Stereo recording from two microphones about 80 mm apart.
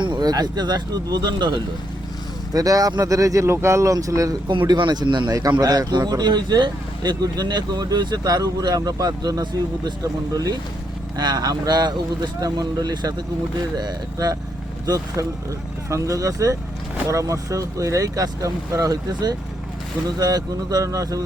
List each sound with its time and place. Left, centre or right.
0.0 s speech: right
2.5 s speech: right
4.4 s speech: right
5.3 s speech: right
10.0 s speech: right
14.8 s speech: right